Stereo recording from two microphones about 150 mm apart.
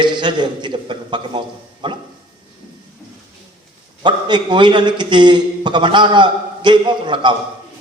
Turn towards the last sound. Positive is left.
turn(degrees=-30)  # may be behind; listen again after turning